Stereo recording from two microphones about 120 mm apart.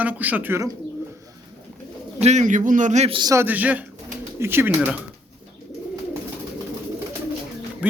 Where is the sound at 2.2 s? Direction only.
70° right (ahead or behind).